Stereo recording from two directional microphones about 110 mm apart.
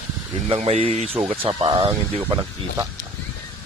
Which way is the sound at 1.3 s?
50° right (ahead or behind).